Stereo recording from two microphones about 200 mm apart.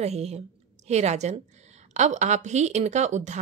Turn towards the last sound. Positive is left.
turn(degrees=-35)  # may be behind; listen again after turning